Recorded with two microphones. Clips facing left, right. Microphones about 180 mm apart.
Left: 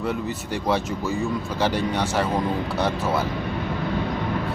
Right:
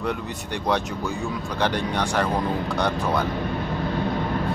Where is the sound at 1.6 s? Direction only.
5° left (ahead or behind).